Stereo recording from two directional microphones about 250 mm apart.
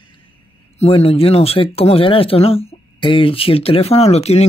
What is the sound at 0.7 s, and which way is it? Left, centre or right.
Speech, left.